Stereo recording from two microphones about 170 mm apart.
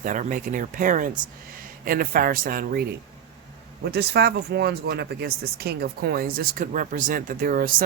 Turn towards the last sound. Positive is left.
turn(degrees=-55)  # may be behind; listen again after turning